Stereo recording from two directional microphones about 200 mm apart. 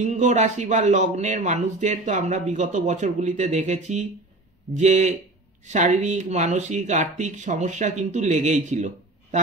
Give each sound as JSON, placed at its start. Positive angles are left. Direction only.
{"t": 0.0, "sound": "speech", "side_deg": -35}